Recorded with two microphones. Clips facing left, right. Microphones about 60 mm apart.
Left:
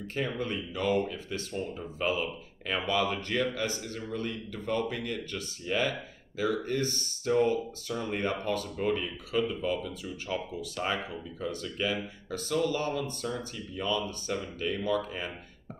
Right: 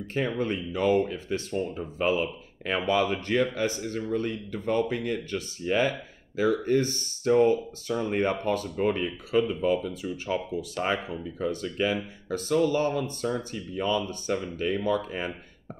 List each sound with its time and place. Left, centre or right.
0.1 s speech: right
7.9 s speech: right